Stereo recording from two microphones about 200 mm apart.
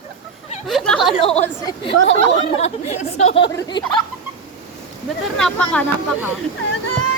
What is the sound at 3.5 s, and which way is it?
Speech, 20° left (ahead or behind).